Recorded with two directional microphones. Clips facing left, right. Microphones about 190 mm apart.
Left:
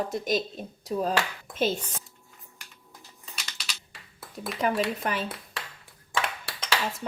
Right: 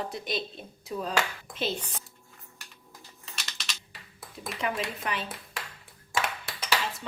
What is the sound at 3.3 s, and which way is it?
Typing, centre (ahead or behind).